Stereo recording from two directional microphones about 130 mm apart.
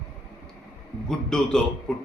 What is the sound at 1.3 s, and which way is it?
Speech, 5° left (ahead or behind).